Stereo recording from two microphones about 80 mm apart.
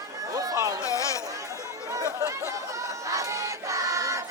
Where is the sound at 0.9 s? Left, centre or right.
Left.